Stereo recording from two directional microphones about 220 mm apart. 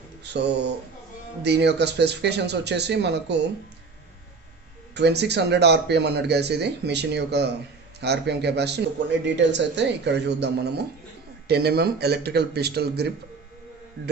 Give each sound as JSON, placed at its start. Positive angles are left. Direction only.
{"t": 0.2, "sound": "speech", "side_deg": -50}
{"t": 4.9, "sound": "speech", "side_deg": -50}